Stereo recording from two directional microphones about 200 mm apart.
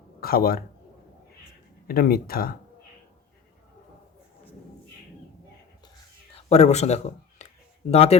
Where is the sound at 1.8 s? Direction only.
50° left (ahead or behind).